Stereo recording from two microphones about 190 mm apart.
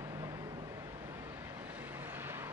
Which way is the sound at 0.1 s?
15° right (ahead or behind).